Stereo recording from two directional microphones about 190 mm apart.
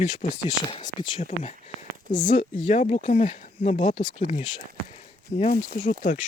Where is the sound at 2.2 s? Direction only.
45° left (ahead or behind).